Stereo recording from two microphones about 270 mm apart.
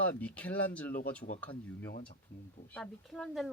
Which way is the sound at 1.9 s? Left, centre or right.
Left.